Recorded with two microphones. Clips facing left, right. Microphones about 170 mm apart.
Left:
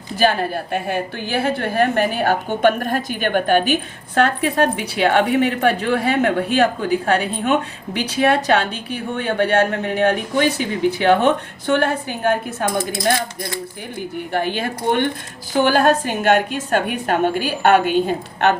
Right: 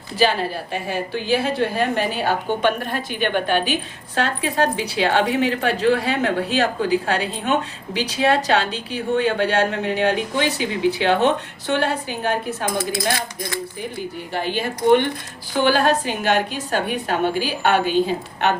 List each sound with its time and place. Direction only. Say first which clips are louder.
0.2 s speech: left 2 dB; 50° left (ahead or behind)
14.3 s speech: left 2 dB; 50° left (ahead or behind)